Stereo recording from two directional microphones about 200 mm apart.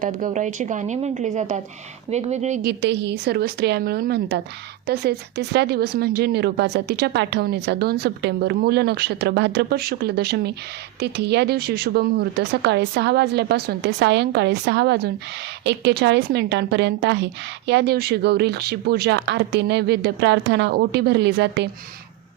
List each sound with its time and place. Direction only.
0.0 s a woman's voice: 40° right (ahead or behind)
2.6 s a woman's voice: 60° right (ahead or behind)